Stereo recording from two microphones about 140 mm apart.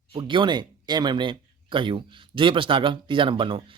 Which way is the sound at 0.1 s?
35° right (ahead or behind).